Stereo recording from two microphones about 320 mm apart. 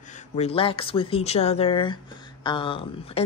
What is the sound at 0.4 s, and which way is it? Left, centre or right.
Speech, centre.